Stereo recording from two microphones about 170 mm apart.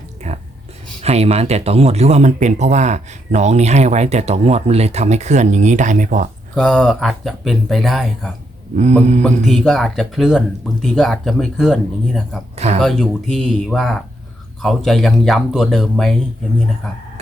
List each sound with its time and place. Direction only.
0.3 s a sound: 40° right (ahead or behind)
1.0 s speech: 40° right (ahead or behind)
6.6 s speech: centre (ahead or behind)
8.7 s speech: 40° right (ahead or behind)
9.5 s speech: centre (ahead or behind)